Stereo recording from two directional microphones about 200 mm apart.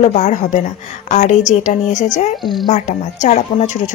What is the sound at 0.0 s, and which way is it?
Speech, 35° left (ahead or behind).